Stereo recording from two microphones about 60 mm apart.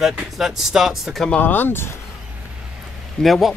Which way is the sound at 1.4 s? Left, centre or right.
Left.